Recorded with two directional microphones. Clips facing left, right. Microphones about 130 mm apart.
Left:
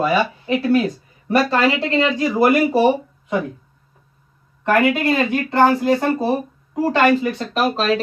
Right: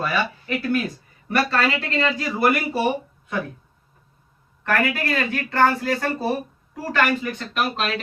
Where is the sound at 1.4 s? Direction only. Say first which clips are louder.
Left 5 dB; 20° left (ahead or behind).